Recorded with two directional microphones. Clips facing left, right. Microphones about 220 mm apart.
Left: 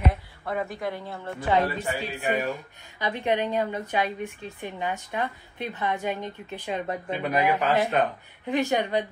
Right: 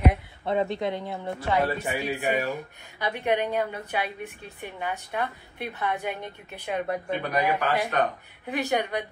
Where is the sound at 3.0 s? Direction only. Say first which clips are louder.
Even; 10° right (ahead or behind).